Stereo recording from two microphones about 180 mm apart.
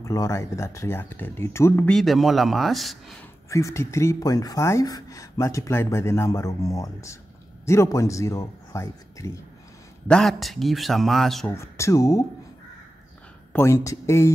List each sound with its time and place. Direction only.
0.0 s speech: 15° left (ahead or behind)
2.0 s speech: centre (ahead or behind)
3.4 s speech: 15° left (ahead or behind)
10.0 s speech: 5° left (ahead or behind)
11.5 s speech: 15° left (ahead or behind)
13.5 s speech: 15° left (ahead or behind)